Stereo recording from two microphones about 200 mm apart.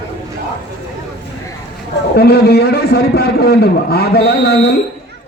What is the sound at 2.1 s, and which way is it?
A man's voice, 50° left (ahead or behind).